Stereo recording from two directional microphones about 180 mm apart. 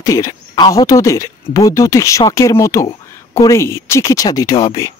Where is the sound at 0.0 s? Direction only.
20° left (ahead or behind).